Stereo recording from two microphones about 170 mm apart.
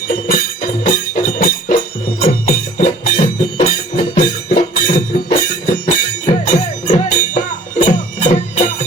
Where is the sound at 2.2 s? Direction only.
40° left (ahead or behind).